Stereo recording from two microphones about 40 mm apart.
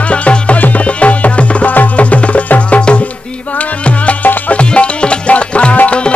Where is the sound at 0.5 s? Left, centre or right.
Left.